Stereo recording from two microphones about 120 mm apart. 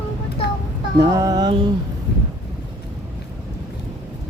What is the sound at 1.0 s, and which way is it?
Speech, 30° right (ahead or behind).